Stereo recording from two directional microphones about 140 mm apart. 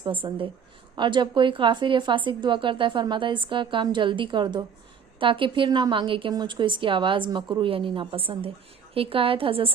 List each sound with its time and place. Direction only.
0.0 s a woman's voice: 35° right (ahead or behind)